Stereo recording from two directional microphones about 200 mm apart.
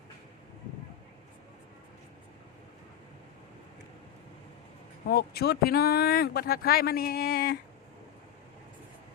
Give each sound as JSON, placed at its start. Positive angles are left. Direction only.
{"t": 5.0, "sound": "speech", "side_deg": 50}